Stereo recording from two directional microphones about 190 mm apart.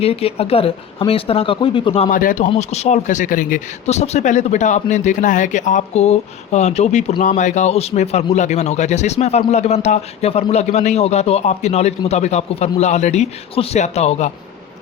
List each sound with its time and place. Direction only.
0.0 s speech: 30° left (ahead or behind)
2.0 s speech: 45° left (ahead or behind)